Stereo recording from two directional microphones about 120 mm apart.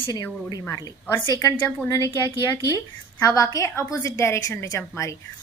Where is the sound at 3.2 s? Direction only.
30° left (ahead or behind).